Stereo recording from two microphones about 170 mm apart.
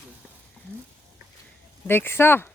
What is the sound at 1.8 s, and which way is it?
Speech, 10° left (ahead or behind).